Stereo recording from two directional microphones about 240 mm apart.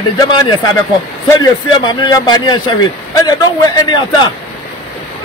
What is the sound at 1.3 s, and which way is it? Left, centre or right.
A man's voice, centre.